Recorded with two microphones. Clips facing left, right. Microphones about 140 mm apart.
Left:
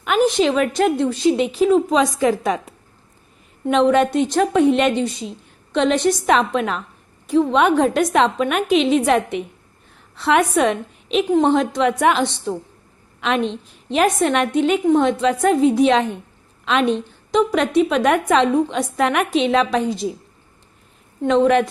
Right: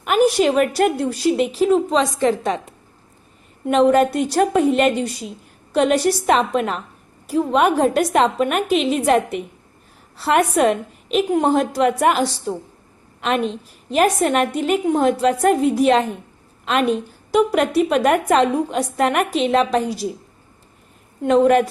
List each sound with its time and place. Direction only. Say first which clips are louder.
0.0 s a woman's voice: right 1 dB; 5° right (ahead or behind)
21.2 s a woman's voice: right 1 dB; 5° right (ahead or behind)